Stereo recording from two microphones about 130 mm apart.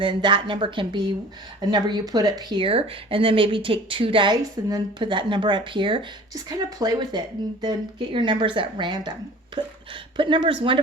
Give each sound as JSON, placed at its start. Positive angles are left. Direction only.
{"t": 0.0, "sound": "speech", "side_deg": -35}